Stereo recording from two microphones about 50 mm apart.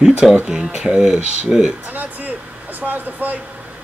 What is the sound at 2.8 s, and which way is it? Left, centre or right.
Speech, right.